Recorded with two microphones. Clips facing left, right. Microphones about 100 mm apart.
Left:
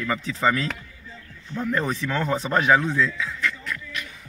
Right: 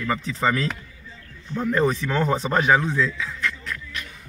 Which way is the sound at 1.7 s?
20° right (ahead or behind).